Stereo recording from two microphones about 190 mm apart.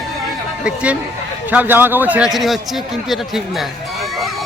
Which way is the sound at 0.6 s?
5° right (ahead or behind).